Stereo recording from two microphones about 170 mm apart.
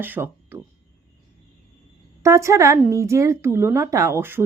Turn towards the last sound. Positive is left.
turn(degrees=-15)  # may be behind; listen again after turning